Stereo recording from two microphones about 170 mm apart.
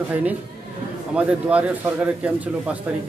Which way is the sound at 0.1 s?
10° right (ahead or behind).